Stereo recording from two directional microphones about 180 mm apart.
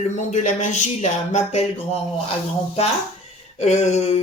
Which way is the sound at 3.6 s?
40° left (ahead or behind).